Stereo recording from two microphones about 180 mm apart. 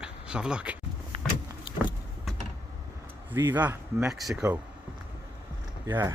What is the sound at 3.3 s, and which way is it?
Speech, 10° right (ahead or behind).